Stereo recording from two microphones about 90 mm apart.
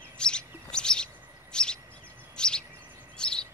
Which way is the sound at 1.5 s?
10° left (ahead or behind).